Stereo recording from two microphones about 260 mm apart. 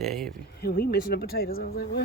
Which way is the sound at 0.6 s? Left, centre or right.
Left.